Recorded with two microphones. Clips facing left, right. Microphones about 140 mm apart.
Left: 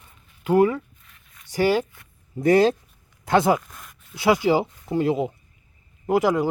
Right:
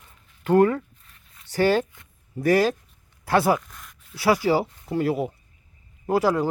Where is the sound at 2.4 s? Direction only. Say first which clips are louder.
Left 3 dB; 25° left (ahead or behind).